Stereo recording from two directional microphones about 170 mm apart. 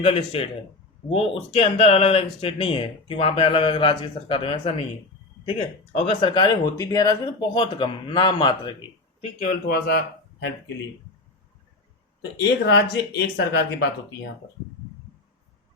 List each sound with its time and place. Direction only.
0.0 s speech: 35° left (ahead or behind)
6.1 s speech: 30° left (ahead or behind)
9.6 s speech: 65° left (ahead or behind)
12.4 s speech: 90° left